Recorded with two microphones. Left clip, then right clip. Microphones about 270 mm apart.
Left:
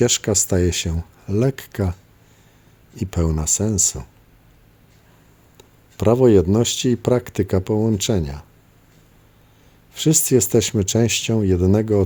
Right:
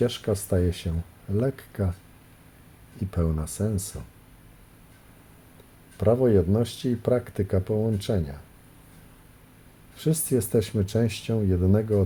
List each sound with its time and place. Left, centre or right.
0.0 s speech: left
3.0 s speech: left
6.0 s speech: left
9.9 s speech: left